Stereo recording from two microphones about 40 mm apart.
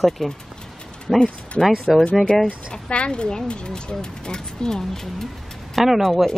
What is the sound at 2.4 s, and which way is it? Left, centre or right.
Speech, left.